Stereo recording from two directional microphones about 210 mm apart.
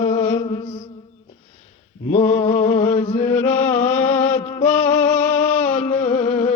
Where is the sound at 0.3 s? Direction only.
25° left (ahead or behind).